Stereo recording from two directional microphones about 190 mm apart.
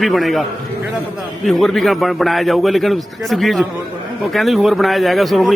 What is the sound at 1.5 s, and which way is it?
Speech, centre (ahead or behind).